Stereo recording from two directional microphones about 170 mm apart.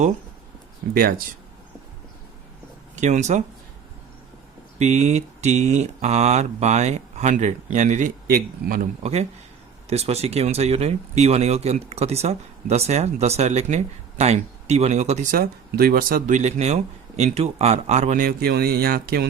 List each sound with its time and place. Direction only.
2.9 s speech: 45° right (ahead or behind)
4.8 s speech: 40° right (ahead or behind); by 8.9 s 60° right (ahead or behind)
9.9 s speech: 40° right (ahead or behind); by 19.3 s 65° right (ahead or behind)